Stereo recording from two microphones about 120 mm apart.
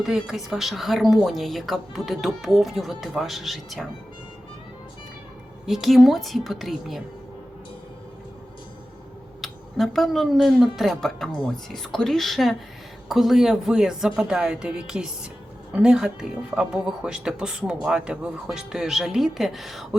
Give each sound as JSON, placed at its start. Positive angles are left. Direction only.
{"t": 0.0, "sound": "speech", "side_deg": -5}
{"t": 5.6, "sound": "speech", "side_deg": 0}
{"t": 9.4, "sound": "speech", "side_deg": 0}